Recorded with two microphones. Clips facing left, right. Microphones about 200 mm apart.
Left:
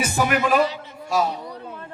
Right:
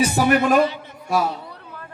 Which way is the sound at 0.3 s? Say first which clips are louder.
Right 3 dB; 45° right (ahead or behind).